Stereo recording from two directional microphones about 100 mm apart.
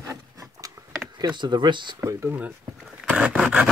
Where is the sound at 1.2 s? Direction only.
50° right (ahead or behind).